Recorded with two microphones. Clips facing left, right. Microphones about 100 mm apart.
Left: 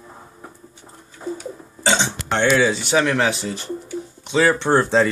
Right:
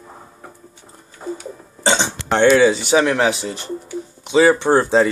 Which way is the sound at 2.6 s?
Centre (ahead or behind).